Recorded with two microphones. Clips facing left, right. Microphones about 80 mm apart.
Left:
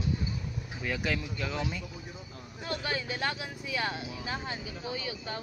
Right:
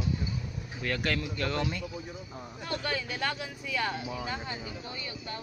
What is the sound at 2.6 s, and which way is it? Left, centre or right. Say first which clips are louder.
Speech: even; centre.